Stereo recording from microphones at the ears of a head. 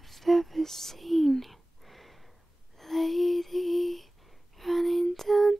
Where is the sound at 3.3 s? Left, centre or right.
Centre.